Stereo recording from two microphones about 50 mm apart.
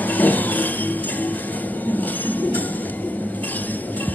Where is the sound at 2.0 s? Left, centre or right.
Left.